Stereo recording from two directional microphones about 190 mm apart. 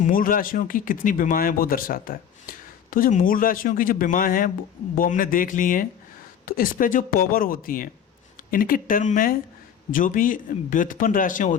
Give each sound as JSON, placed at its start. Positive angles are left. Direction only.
{"t": 0.0, "sound": "speech", "side_deg": 45}